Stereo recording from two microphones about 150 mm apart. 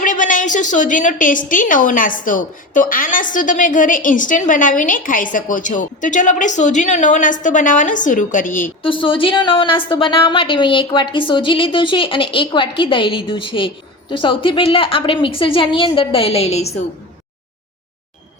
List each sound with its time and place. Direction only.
0.0 s a woman's voice: 60° left (ahead or behind)
8.8 s a woman's voice: 35° left (ahead or behind)